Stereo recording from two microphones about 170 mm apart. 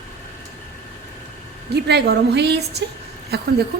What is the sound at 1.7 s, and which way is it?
A woman's voice, 75° right (ahead or behind).